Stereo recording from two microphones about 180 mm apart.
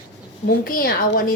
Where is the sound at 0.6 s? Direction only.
55° left (ahead or behind).